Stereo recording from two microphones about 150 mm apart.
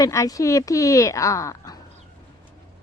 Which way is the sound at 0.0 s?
20° left (ahead or behind).